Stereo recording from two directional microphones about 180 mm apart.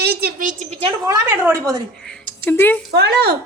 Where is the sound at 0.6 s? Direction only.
35° right (ahead or behind).